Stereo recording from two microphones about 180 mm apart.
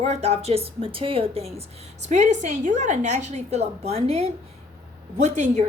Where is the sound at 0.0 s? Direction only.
35° right (ahead or behind).